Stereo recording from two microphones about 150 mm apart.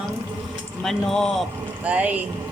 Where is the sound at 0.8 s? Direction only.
5° left (ahead or behind).